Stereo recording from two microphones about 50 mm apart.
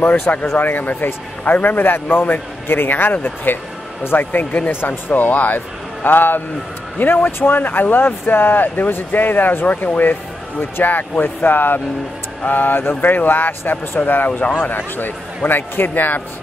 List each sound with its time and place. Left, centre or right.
0.0 s a man's voice: left